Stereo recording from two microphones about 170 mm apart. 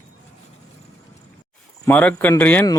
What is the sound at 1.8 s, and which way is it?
Speech, 10° left (ahead or behind).